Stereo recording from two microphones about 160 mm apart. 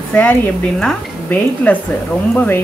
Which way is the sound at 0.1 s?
10° left (ahead or behind).